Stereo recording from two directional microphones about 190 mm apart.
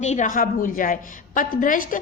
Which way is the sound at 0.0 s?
40° left (ahead or behind).